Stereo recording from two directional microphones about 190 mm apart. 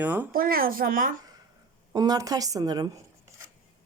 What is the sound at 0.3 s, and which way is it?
Speech, 50° right (ahead or behind).